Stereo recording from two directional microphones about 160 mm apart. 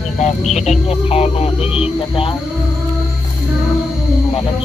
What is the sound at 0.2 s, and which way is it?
Speech, 45° left (ahead or behind).